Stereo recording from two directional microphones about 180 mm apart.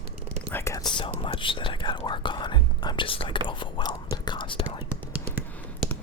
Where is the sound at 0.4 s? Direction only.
15° left (ahead or behind).